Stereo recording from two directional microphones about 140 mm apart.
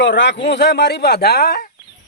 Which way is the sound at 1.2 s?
90° left.